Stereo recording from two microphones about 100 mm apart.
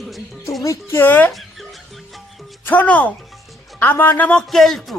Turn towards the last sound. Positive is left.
turn(degrees=5)  # may be behind; listen again after turning